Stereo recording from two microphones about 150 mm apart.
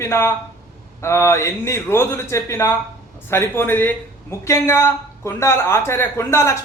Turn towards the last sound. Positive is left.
turn(degrees=20)  # may be behind; listen again after turning